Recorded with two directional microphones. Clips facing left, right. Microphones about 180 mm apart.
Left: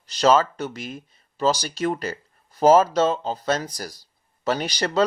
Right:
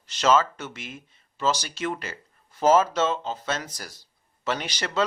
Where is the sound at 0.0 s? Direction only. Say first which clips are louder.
Left 3 dB; 35° left (ahead or behind).